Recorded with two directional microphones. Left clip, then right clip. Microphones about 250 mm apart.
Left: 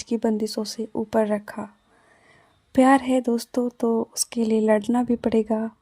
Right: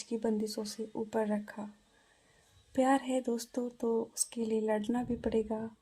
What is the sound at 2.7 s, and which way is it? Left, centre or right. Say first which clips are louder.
Speech: left 12 dB; left.